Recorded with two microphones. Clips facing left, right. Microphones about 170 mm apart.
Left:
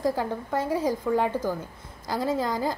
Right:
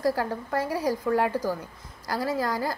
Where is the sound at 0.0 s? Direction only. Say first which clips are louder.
Even; 15° left (ahead or behind).